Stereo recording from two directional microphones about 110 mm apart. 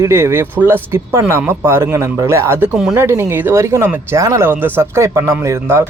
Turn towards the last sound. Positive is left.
turn(degrees=-25)  # may be behind; listen again after turning